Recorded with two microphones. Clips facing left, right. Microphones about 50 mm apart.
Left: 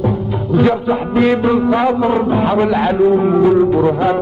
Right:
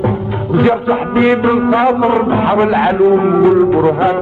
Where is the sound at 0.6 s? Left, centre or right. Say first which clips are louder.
Right 2 dB; right.